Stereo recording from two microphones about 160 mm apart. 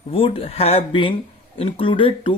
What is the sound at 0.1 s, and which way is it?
Speech, 35° left (ahead or behind).